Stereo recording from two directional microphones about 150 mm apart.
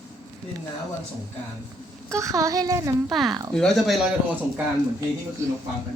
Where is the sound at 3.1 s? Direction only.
Centre (ahead or behind).